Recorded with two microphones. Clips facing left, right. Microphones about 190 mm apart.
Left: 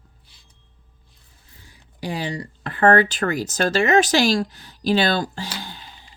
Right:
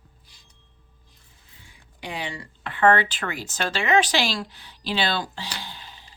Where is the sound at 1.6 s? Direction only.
35° left (ahead or behind).